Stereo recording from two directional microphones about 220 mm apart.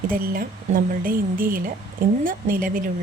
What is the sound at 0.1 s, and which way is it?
Speech, 40° right (ahead or behind).